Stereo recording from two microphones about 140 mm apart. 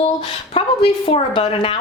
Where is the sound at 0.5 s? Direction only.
45° left (ahead or behind).